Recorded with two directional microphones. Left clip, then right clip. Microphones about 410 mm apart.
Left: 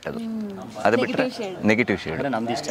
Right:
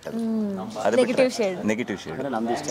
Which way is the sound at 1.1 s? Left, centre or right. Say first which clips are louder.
Right 4 dB; right.